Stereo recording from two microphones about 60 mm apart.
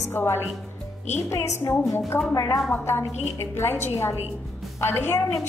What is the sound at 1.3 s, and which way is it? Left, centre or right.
A woman's voice, left.